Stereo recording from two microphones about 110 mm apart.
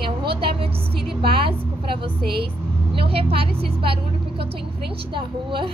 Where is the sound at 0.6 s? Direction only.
20° right (ahead or behind).